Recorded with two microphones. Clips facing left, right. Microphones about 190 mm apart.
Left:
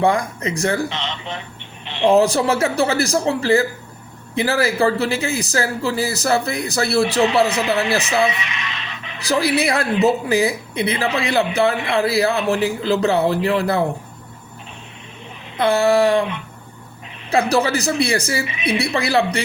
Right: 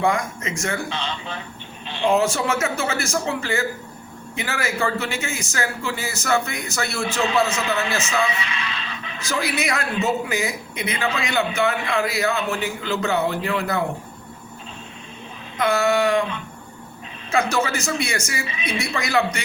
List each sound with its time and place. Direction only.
0.0 s speech: 35° left (ahead or behind)
0.9 s speech: 20° left (ahead or behind)
2.0 s speech: 35° left (ahead or behind)
8.4 s speech: 15° left (ahead or behind)
9.2 s speech: 35° left (ahead or behind)
15.5 s speech: 30° left (ahead or behind)
17.5 s speech: 35° left (ahead or behind)